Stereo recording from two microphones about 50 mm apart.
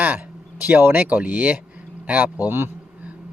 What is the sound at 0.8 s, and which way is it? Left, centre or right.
Speech, right.